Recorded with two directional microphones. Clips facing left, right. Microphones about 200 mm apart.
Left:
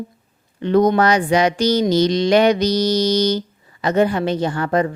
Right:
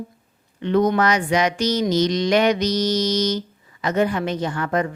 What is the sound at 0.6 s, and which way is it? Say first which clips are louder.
Mantra: left 3 dB; 35° left (ahead or behind).